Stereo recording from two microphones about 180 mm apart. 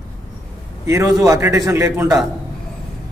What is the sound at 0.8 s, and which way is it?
A man's voice, 15° right (ahead or behind).